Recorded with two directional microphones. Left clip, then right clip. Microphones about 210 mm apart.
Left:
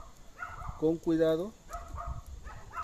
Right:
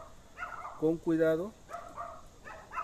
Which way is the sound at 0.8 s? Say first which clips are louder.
Left 1 dB; 5° left (ahead or behind).